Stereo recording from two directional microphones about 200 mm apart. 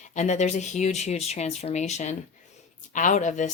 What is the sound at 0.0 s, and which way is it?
A woman's voice, 35° left (ahead or behind).